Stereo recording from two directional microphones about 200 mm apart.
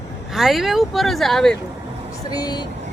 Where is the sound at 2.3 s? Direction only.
20° left (ahead or behind).